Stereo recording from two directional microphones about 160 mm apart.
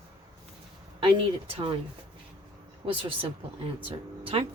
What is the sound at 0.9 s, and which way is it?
Speech, 35° right (ahead or behind).